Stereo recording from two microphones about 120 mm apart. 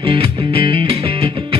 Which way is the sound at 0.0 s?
50° right (ahead or behind).